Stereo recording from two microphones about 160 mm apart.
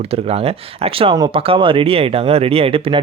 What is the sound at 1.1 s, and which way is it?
Speech, 25° right (ahead or behind).